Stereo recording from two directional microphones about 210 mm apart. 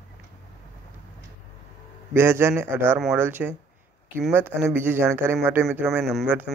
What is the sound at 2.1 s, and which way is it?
Speech, 10° right (ahead or behind).